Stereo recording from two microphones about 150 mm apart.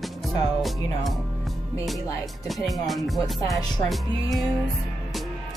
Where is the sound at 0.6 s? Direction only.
Centre (ahead or behind).